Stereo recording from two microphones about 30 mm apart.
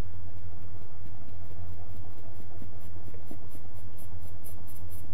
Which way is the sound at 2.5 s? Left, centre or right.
Right.